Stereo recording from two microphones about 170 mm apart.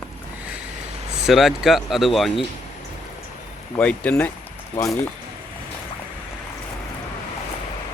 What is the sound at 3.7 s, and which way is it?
Speech, 5° left (ahead or behind).